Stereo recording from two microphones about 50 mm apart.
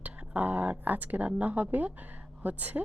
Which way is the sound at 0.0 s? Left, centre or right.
Right.